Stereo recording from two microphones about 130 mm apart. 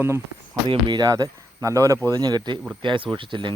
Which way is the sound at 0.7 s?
35° right (ahead or behind).